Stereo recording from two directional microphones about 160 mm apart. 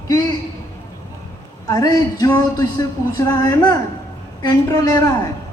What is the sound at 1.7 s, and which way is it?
A woman's voice, 20° left (ahead or behind).